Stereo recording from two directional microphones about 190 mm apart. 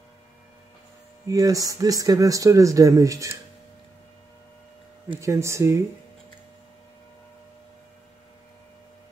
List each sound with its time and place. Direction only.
1.2 s speech: 20° right (ahead or behind)
5.1 s speech: 15° right (ahead or behind)